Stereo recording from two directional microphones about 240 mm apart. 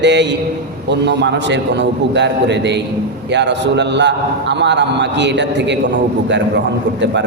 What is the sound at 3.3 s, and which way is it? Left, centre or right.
A man's voice, right.